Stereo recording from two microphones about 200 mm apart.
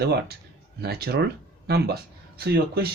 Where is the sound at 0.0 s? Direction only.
55° right (ahead or behind).